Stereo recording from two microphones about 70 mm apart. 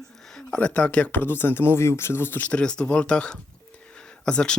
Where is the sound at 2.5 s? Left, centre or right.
Centre.